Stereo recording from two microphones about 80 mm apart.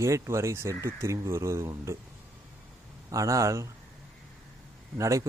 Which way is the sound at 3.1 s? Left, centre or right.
Right.